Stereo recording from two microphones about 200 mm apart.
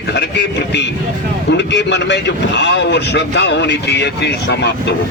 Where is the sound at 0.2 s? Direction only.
60° left (ahead or behind).